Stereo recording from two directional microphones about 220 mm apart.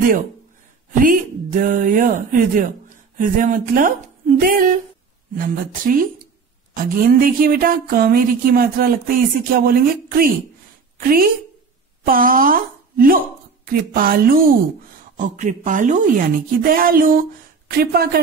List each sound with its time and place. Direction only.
0.9 s a woman's voice: 40° right (ahead or behind)